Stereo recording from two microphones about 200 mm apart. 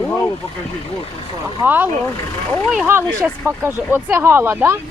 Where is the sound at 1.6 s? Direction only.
10° right (ahead or behind).